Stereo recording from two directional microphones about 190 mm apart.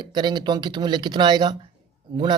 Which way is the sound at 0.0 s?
25° right (ahead or behind).